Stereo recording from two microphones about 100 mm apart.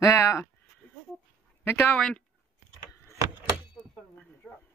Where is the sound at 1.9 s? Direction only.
5° left (ahead or behind).